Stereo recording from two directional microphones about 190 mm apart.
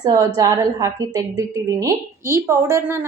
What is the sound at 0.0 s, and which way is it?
A woman's voice, 15° right (ahead or behind).